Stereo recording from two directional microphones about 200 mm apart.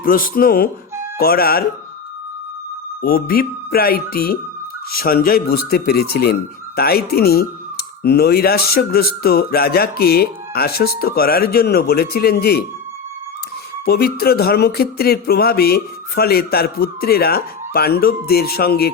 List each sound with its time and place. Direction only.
0.0 s speech: 45° left (ahead or behind)
3.0 s speech: 50° left (ahead or behind)
13.8 s speech: 50° left (ahead or behind)